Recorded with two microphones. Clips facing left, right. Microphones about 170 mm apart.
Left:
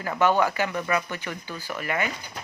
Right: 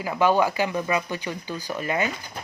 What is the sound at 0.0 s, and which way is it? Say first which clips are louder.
Speech: right 1 dB; 10° right (ahead or behind).